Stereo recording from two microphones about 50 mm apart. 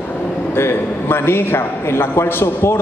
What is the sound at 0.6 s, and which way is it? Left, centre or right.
A man's voice, left.